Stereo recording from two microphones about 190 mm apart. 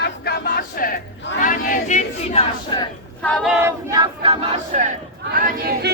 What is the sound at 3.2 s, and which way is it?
Battle cry, centre (ahead or behind).